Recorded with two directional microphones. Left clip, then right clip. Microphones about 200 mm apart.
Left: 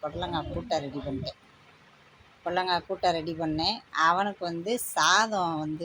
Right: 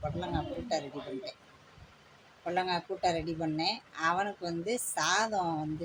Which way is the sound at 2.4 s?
20° left (ahead or behind).